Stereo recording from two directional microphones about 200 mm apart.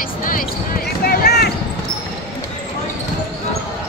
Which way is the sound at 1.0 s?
55° left (ahead or behind).